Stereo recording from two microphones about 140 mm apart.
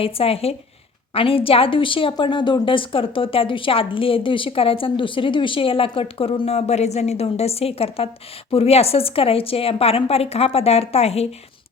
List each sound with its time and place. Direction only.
0.0 s a woman's voice: 45° left (ahead or behind)